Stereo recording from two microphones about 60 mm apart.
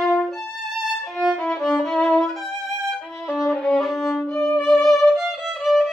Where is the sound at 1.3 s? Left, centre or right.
Centre.